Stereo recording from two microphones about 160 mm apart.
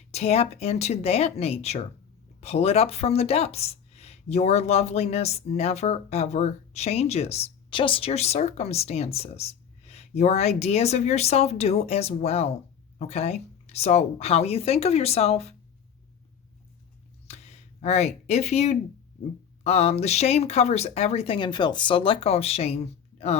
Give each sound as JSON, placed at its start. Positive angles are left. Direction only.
{"t": 0.1, "sound": "speech", "side_deg": 40}
{"t": 17.2, "sound": "a sound", "side_deg": 40}
{"t": 19.6, "sound": "speech", "side_deg": 40}